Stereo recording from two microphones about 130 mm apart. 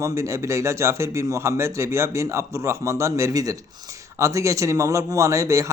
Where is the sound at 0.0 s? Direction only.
20° right (ahead or behind).